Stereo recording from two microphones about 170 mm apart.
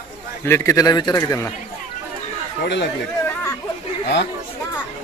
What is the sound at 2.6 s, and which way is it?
Speech, 85° left.